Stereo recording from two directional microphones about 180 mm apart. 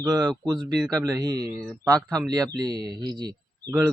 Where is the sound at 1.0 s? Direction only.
20° right (ahead or behind).